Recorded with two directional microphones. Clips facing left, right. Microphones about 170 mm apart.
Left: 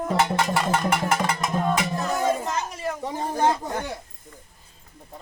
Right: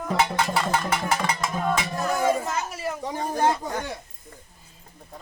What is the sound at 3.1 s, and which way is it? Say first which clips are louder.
Speech: even; 25° left (ahead or behind).